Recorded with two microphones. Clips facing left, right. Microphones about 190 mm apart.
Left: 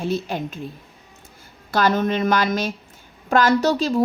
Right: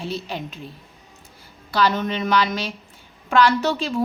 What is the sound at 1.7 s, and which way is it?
A woman's voice, 50° left (ahead or behind).